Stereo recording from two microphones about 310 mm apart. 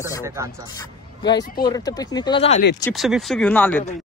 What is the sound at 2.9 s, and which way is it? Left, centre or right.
Speech, centre.